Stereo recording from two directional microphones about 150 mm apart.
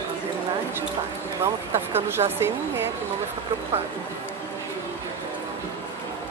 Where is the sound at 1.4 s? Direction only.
15° right (ahead or behind).